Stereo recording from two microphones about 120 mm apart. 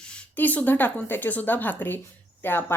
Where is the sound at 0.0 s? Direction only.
10° left (ahead or behind).